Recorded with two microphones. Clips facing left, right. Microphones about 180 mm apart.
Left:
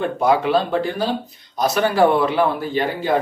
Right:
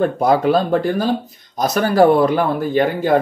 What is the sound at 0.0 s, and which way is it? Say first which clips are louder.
A man's voice: right 3 dB; 40° right (ahead or behind).